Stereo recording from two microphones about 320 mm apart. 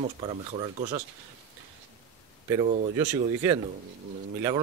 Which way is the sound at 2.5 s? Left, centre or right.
Centre.